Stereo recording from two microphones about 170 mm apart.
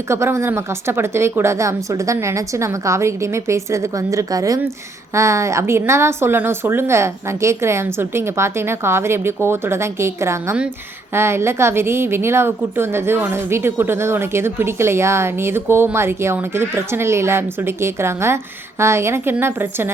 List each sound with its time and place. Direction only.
0.1 s a woman's voice: 15° right (ahead or behind)